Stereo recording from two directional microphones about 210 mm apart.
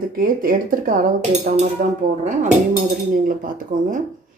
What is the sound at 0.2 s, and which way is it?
Speech, 40° right (ahead or behind).